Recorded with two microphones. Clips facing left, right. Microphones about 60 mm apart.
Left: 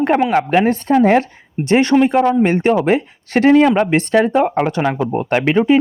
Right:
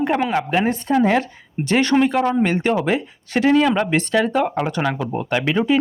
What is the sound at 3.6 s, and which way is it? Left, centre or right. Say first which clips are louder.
A woman's voice: left 4 dB; left.